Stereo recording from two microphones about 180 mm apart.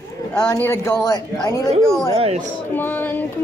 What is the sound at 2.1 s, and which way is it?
Speech, 35° right (ahead or behind).